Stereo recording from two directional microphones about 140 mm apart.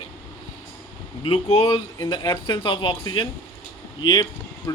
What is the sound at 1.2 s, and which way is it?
Speech, 45° left (ahead or behind).